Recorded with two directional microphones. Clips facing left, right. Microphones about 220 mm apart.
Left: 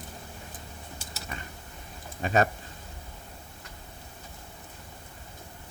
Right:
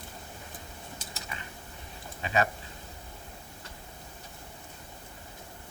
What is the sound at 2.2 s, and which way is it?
Speech, 45° left (ahead or behind).